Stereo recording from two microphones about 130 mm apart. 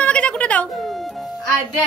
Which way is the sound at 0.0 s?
10° left (ahead or behind).